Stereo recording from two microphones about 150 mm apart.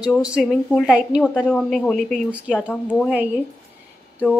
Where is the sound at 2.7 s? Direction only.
10° left (ahead or behind).